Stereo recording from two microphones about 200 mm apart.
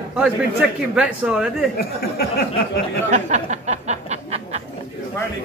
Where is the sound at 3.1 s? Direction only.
35° right (ahead or behind).